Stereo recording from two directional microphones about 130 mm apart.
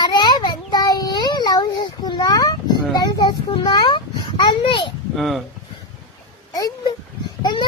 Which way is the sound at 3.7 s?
35° left (ahead or behind).